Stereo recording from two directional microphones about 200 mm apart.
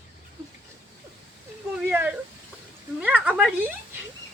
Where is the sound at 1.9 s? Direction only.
10° right (ahead or behind).